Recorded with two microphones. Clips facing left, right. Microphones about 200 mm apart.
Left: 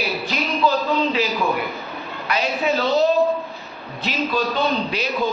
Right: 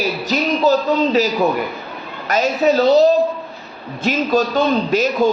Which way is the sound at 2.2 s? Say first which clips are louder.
Right 6 dB; 45° right (ahead or behind).